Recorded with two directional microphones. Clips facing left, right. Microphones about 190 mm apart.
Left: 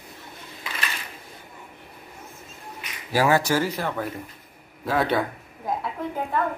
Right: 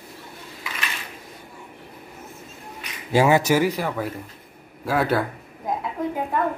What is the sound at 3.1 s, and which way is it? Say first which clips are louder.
Speech: right 3 dB; 20° right (ahead or behind).